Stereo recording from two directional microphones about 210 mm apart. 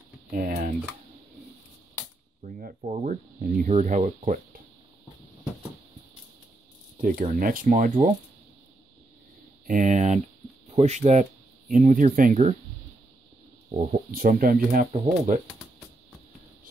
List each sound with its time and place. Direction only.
0.3 s speech: 45° right (ahead or behind)
2.4 s speech: 40° right (ahead or behind)
7.0 s speech: 40° right (ahead or behind)
9.7 s speech: 35° right (ahead or behind)
13.7 s speech: 40° right (ahead or behind)
14.9 s speech: 30° right (ahead or behind)